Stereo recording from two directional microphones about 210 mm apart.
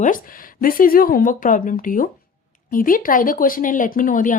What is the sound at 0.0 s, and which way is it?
Speech, 40° left (ahead or behind).